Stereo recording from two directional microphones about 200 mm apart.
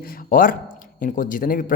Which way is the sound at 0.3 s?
45° left (ahead or behind).